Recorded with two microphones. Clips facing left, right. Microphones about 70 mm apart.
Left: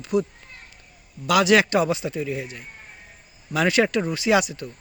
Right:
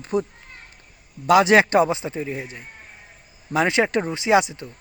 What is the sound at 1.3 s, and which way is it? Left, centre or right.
Speech, right.